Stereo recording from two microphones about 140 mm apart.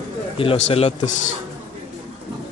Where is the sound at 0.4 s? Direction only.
40° left (ahead or behind).